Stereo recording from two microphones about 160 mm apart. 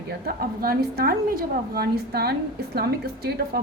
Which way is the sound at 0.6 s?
70° right (ahead or behind).